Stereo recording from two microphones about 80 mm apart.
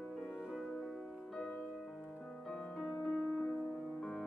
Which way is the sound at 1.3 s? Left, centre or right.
Centre.